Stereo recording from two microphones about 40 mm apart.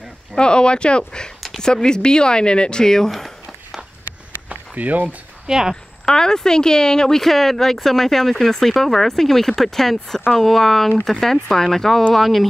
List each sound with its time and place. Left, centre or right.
0.4 s speech: left; by 3.3 s centre
4.5 s a sound: right
5.5 s speech: centre
6.0 s speech: centre